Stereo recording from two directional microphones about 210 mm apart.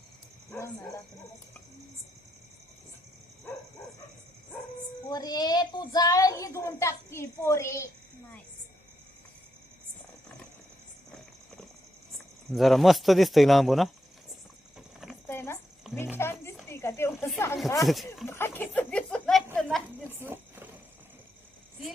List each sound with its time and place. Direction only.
0.5 s bow-wow: 5° left (ahead or behind)
5.0 s a child's voice: 20° left (ahead or behind)
12.5 s speech: centre (ahead or behind)
15.3 s a sound: 10° left (ahead or behind)
16.1 s music: 10° left (ahead or behind)
16.6 s speech: 10° left (ahead or behind)
17.8 s speech: centre (ahead or behind)
18.3 s a child's voice: 10° left (ahead or behind)
20.1 s a sound: 10° right (ahead or behind)